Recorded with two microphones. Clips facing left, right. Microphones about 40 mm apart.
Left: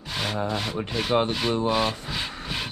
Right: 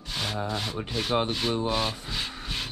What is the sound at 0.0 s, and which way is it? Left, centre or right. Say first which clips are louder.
Rub: left 3 dB; centre.